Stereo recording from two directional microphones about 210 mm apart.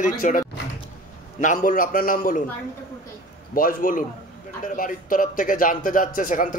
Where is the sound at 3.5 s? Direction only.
40° left (ahead or behind).